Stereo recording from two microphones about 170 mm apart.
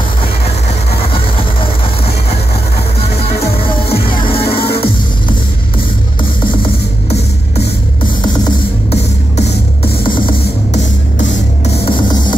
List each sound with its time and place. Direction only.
3.9 s music: 35° left (ahead or behind)
10.0 s music: 30° left (ahead or behind)
11.6 s music: 35° left (ahead or behind)